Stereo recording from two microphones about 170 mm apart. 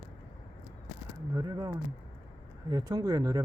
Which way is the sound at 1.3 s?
20° right (ahead or behind).